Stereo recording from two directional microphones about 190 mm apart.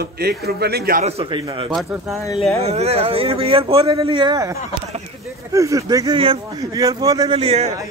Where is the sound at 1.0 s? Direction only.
30° right (ahead or behind).